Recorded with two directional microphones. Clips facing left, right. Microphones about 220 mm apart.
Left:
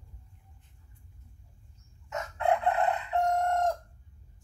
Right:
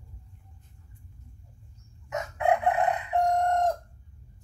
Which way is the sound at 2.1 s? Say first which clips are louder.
Right 3 dB; 15° right (ahead or behind).